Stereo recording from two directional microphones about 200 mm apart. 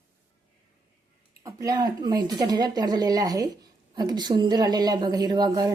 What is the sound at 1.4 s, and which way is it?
A woman's voice, 15° right (ahead or behind).